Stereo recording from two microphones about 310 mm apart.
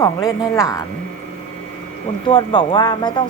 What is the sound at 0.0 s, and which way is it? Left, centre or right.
Speech, centre.